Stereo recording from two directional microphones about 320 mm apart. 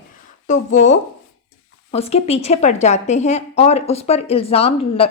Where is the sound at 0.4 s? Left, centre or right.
Left.